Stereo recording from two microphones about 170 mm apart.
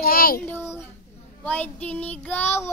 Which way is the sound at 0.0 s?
65° left (ahead or behind).